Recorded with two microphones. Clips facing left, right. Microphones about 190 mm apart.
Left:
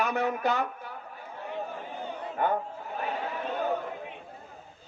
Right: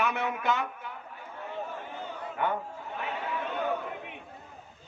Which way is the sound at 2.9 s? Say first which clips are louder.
Left 3 dB; 35° left (ahead or behind).